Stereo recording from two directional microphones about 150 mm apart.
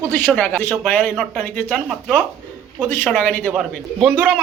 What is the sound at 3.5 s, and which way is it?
Speech, 5° right (ahead or behind).